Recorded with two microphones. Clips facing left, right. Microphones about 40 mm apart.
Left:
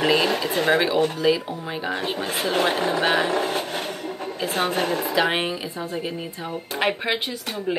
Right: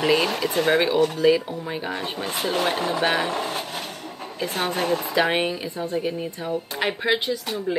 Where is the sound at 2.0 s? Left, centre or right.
Left.